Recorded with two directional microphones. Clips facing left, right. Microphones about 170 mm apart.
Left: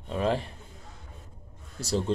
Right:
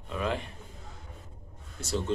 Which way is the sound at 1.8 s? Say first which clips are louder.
Left 5 dB; 35° left (ahead or behind).